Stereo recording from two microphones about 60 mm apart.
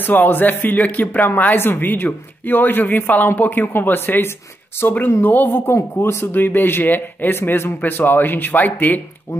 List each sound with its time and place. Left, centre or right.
0.0 s speech: left
6.4 s speech: left
9.3 s speech: left